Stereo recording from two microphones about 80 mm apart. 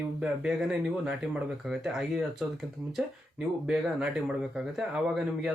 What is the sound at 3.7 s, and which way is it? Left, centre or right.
Speech, centre.